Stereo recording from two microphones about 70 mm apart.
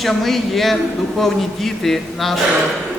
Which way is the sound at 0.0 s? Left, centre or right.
Centre.